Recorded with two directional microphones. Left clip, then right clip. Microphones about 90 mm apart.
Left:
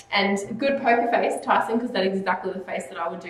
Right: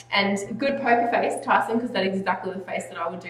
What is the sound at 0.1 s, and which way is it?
A woman's voice, 15° right (ahead or behind).